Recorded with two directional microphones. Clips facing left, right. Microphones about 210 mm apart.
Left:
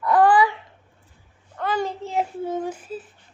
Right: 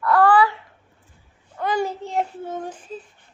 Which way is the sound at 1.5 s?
10° right (ahead or behind).